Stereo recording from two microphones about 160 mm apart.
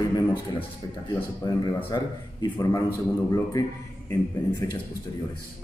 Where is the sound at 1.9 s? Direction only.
25° left (ahead or behind).